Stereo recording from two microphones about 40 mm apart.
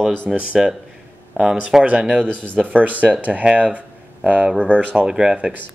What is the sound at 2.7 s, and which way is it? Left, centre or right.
Speech, right.